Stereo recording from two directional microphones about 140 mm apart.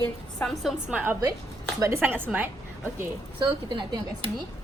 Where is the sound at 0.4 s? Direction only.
Centre (ahead or behind).